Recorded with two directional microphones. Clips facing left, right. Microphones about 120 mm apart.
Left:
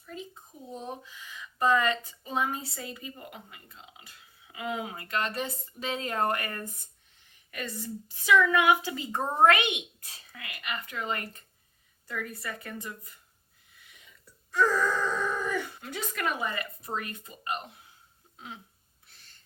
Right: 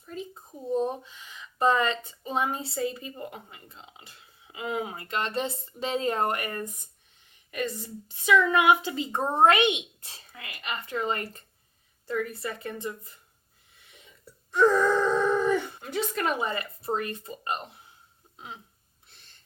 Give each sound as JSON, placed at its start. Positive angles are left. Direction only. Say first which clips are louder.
{"t": 0.0, "sound": "a sound", "louder": "right 4 dB", "side_deg": -35}
{"t": 1.4, "sound": "a woman's voice", "louder": "right 1 dB", "side_deg": -25}
{"t": 14.5, "sound": "a woman's voice", "louder": "right 5 dB", "side_deg": -20}